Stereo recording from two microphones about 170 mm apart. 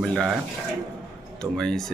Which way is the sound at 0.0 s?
Centre (ahead or behind).